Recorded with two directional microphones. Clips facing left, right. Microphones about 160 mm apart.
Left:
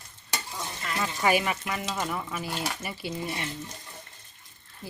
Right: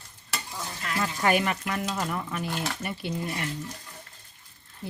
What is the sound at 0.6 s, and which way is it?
Speech, 20° left (ahead or behind).